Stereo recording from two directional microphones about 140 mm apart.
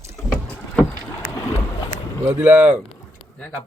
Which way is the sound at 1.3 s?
15° left (ahead or behind).